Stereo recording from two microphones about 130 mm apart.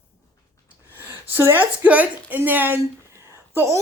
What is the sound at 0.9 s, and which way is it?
A woman's voice, 15° right (ahead or behind).